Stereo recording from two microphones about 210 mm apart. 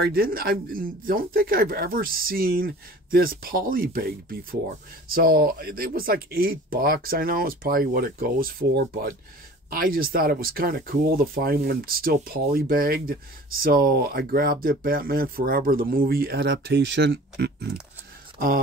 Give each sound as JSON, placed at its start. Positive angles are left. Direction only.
{"t": 0.0, "sound": "speech", "side_deg": -45}